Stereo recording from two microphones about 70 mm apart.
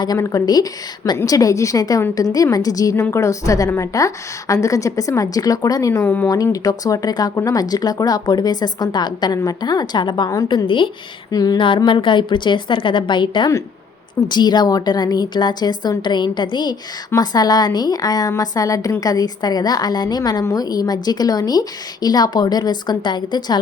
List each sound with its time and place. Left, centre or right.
0.2 s a woman's voice: left
3.1 s a woman's voice: left
6.0 s speech: left
6.2 s a woman's voice: left
7.3 s a woman's voice: left
11.3 s a woman's voice: left
17.2 s speech: left